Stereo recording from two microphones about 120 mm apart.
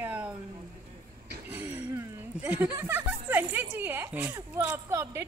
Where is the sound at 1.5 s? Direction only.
15° right (ahead or behind).